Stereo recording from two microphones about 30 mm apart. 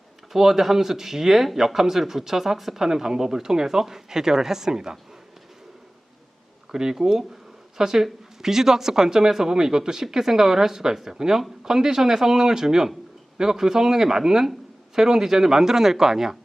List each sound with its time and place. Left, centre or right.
0.3 s speech: centre
6.7 s speech: right